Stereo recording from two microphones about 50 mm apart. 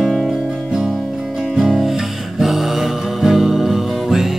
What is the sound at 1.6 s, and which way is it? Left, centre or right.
Music, centre.